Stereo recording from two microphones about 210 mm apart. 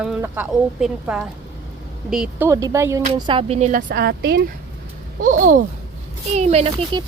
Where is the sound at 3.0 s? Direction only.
25° right (ahead or behind); by 4.5 s 50° right (ahead or behind).